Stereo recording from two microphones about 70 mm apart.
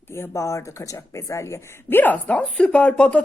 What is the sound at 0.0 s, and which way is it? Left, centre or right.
Speech, left.